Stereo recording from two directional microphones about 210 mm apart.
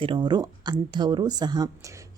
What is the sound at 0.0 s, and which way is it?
Speech, 20° right (ahead or behind).